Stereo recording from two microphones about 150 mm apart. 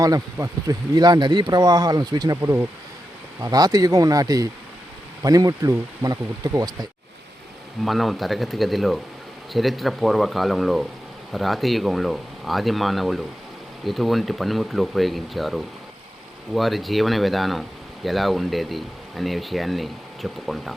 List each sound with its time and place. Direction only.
0.0 s speech: 25° right (ahead or behind)
7.9 s speech: centre (ahead or behind)